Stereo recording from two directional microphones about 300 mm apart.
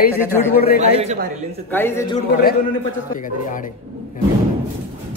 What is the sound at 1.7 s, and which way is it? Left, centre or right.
Speech, centre.